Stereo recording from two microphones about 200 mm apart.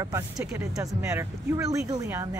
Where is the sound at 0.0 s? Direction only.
15° right (ahead or behind).